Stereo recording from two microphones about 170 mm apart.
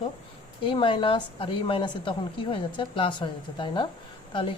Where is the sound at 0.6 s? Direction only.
30° left (ahead or behind).